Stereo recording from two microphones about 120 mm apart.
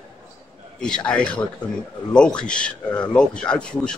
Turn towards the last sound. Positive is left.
turn(degrees=10)  # may be behind; listen again after turning